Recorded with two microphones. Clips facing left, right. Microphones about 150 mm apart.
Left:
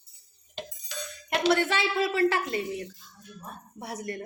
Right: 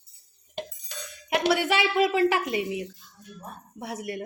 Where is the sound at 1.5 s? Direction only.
10° right (ahead or behind).